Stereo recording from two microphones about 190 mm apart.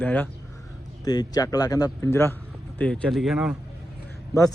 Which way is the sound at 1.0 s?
20° left (ahead or behind).